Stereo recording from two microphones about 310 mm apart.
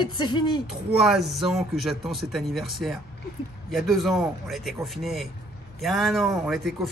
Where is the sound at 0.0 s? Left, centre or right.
Centre.